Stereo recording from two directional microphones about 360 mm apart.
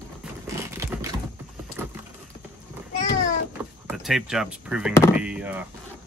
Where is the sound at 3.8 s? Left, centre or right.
Centre.